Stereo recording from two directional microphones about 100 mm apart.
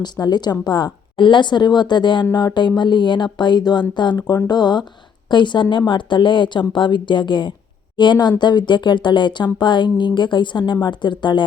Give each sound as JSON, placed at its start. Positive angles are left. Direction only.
{"t": 0.0, "sound": "speech", "side_deg": 45}